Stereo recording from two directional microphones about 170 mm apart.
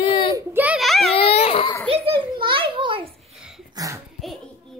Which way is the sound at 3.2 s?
Centre (ahead or behind).